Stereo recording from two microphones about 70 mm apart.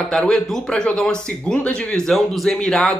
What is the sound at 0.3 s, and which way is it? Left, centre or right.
Speech, centre.